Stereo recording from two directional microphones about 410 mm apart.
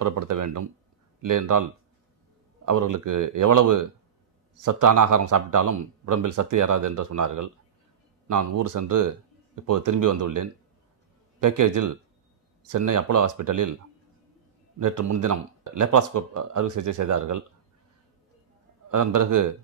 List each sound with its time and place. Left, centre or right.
0.0 s speech: right
14.8 s speech: right
18.9 s speech: right